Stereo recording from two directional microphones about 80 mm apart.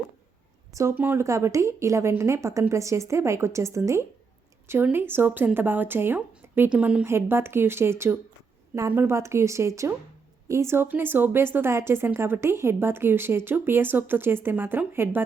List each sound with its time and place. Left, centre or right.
0.7 s speech: right
0.9 s speech: right
4.7 s speech: right
6.7 s a woman's voice: centre
7.0 s speech: right